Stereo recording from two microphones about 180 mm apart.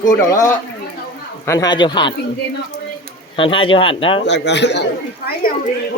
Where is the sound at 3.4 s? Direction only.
30° left (ahead or behind).